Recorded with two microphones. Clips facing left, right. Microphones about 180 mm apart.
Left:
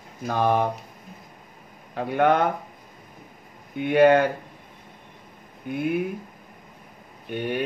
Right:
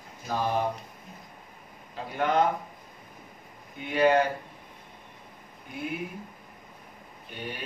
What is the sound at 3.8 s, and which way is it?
Speech, 60° left (ahead or behind).